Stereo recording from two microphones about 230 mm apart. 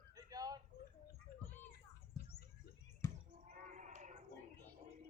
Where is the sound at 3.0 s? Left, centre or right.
Centre.